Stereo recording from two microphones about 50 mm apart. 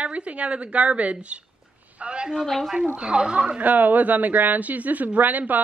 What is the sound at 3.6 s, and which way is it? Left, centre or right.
A woman's voice, right.